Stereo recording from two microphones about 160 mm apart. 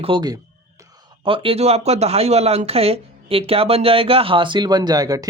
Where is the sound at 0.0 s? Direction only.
30° right (ahead or behind).